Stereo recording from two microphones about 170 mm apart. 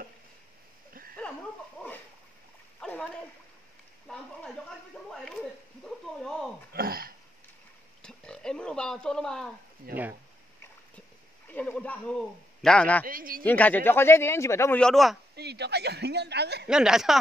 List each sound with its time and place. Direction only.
2.8 s splash: 5° left (ahead or behind)
4.6 s speech: 5° left (ahead or behind)
6.7 s a sound: 60° right (ahead or behind)
8.0 s speech: 5° left (ahead or behind)
11.4 s speech: 10° left (ahead or behind)
13.0 s speech: 55° right (ahead or behind)
13.4 s speech: 10° left (ahead or behind)
14.8 s speech: centre (ahead or behind)
15.3 s speech: 75° right (ahead or behind)
16.6 s speech: 5° right (ahead or behind)